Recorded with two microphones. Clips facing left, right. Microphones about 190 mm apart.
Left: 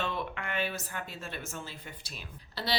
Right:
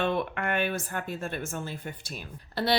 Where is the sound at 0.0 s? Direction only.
55° right (ahead or behind).